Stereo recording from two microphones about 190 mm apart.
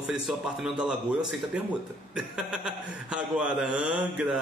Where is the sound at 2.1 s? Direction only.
5° right (ahead or behind).